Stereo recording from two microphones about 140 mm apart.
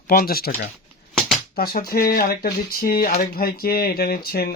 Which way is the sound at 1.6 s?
90° left.